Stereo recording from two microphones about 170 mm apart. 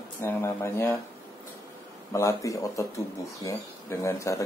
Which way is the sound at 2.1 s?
20° left (ahead or behind).